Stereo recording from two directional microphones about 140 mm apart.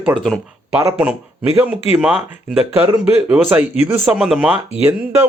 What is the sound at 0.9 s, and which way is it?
Speech, 10° right (ahead or behind).